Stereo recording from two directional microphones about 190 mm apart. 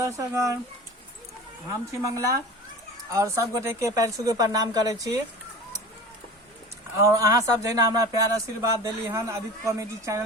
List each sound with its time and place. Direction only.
0.0 s speech: 15° right (ahead or behind)
2.0 s speech: 15° right (ahead or behind)
7.1 s speech: 20° right (ahead or behind)